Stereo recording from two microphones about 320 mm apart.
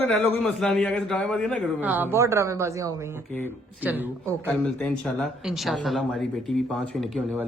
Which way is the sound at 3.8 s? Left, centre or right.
Centre.